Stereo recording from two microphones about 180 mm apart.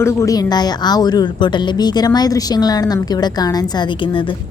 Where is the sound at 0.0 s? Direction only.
15° left (ahead or behind).